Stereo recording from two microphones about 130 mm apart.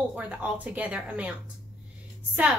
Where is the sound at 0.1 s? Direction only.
10° right (ahead or behind).